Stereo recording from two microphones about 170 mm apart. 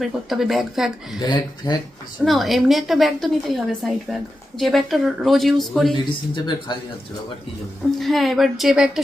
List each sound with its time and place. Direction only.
0.0 s a woman's voice: centre (ahead or behind)
1.2 s speech: 25° left (ahead or behind)
2.2 s a woman's voice: centre (ahead or behind)
6.1 s speech: 25° left (ahead or behind)
7.9 s a woman's voice: centre (ahead or behind)